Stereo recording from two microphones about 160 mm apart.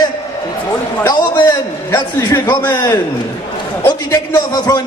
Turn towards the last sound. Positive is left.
turn(degrees=25)  # may be behind; listen again after turning